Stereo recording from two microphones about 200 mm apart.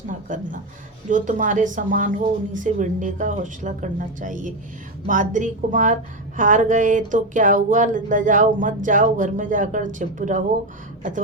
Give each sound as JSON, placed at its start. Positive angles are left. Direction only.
{"t": 0.1, "sound": "a woman's voice", "side_deg": -40}